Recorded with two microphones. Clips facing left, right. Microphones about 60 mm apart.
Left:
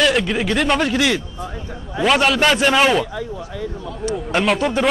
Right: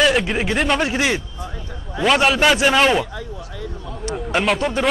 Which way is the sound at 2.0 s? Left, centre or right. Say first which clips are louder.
Even; centre.